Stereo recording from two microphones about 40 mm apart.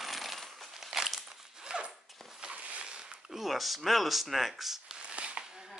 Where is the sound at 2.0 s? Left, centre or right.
Centre.